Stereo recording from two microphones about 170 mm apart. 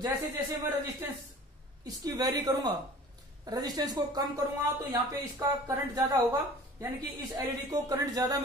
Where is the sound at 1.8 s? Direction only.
20° right (ahead or behind).